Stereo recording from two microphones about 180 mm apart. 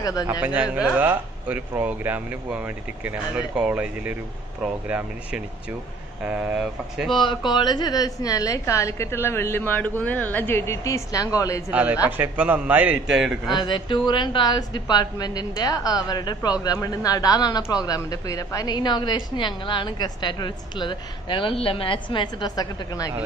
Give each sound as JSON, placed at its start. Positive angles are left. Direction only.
{"t": 0.0, "sound": "a man's voice", "side_deg": 20}
{"t": 0.6, "sound": "speech", "side_deg": -5}
{"t": 7.2, "sound": "a woman's voice", "side_deg": 25}
{"t": 11.7, "sound": "speech", "side_deg": -10}
{"t": 13.5, "sound": "a man's voice", "side_deg": 25}